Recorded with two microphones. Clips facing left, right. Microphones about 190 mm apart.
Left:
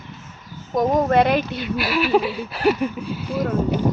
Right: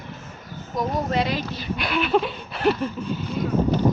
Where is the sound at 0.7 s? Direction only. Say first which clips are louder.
Left 7 dB; 45° left (ahead or behind).